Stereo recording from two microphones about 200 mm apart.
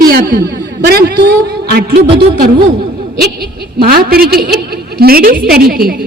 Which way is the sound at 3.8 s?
50° right (ahead or behind).